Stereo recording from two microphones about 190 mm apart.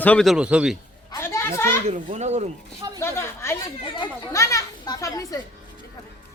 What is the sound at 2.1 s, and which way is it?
Chopping, 35° right (ahead or behind).